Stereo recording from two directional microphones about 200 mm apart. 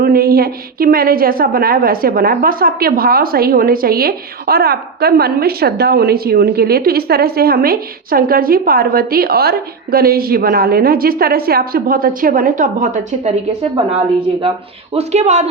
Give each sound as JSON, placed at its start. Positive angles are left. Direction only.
{"t": 0.0, "sound": "a woman's voice", "side_deg": -50}
{"t": 14.9, "sound": "speech", "side_deg": -35}